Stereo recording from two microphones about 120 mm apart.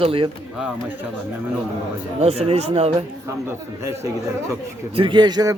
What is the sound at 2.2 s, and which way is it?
Speech, 60° right (ahead or behind).